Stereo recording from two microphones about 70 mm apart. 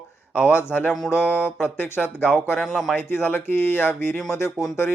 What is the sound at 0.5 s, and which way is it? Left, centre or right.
Speech, left.